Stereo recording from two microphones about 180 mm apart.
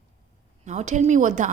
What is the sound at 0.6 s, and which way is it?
Speech, 40° right (ahead or behind).